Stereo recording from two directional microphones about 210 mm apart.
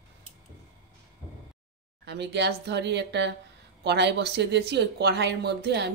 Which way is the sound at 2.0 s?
55° right (ahead or behind).